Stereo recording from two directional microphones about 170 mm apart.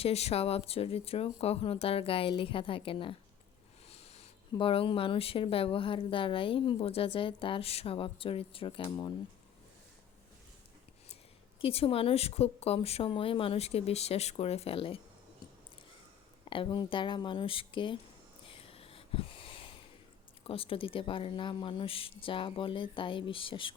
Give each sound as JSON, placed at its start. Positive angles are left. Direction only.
{"t": 0.0, "sound": "a woman's voice", "side_deg": 40}
{"t": 3.9, "sound": "a sound", "side_deg": 40}
{"t": 4.5, "sound": "a woman's voice", "side_deg": 30}
{"t": 11.6, "sound": "a woman's voice", "side_deg": 35}
{"t": 16.5, "sound": "speech", "side_deg": 30}
{"t": 18.4, "sound": "a sound", "side_deg": 35}
{"t": 20.4, "sound": "a woman's voice", "side_deg": 35}